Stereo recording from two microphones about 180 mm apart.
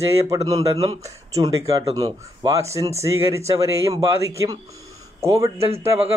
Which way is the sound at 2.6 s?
15° right (ahead or behind).